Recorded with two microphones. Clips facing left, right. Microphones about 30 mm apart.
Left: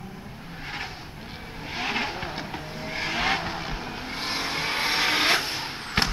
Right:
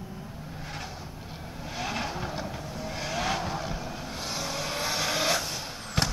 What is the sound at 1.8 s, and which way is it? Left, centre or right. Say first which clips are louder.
Vehicle: left 4 dB; left.